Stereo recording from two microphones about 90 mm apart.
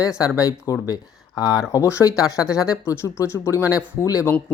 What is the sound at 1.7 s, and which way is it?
Speech, 35° left (ahead or behind).